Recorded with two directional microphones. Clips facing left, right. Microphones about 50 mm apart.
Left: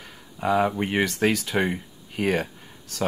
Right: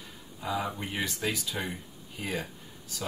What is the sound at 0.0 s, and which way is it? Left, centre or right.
Speech, left.